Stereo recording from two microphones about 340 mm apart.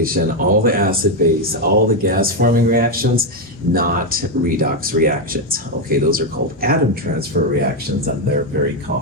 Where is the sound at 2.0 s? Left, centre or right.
Right.